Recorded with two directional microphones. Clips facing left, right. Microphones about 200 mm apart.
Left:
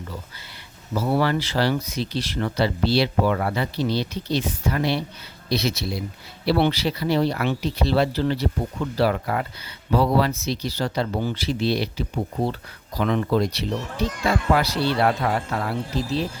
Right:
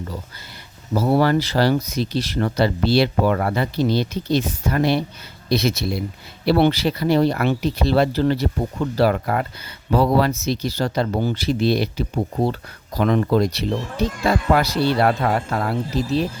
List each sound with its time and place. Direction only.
0.9 s speech: 40° right (ahead or behind)